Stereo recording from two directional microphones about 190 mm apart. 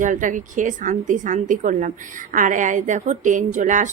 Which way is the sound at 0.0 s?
40° right (ahead or behind).